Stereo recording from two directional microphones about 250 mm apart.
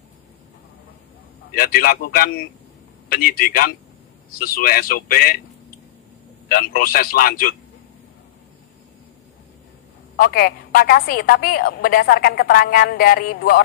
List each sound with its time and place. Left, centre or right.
1.5 s a woman's voice: left
6.5 s a woman's voice: left
10.1 s a woman's voice: left